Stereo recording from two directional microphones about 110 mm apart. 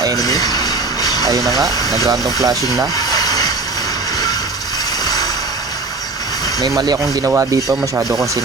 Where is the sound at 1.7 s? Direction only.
35° left (ahead or behind).